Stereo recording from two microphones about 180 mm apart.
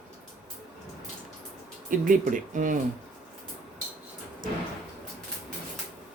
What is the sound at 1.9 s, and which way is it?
Speech, 45° right (ahead or behind).